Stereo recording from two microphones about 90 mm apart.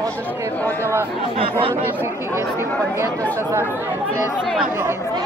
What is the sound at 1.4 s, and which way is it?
Speech, 90° right.